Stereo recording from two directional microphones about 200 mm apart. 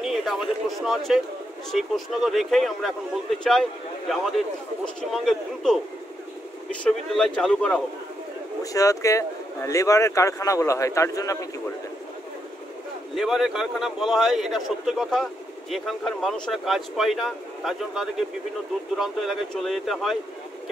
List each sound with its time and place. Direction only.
0.0 s a man's voice: centre (ahead or behind)
4.8 s a man's voice: centre (ahead or behind)
6.8 s a man's voice: 5° left (ahead or behind)
8.7 s speech: 15° left (ahead or behind)
13.1 s a man's voice: centre (ahead or behind)